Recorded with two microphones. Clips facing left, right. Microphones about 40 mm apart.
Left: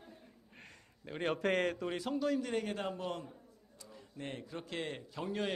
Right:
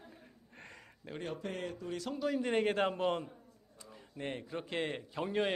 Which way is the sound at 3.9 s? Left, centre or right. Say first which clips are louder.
Right 3 dB; centre.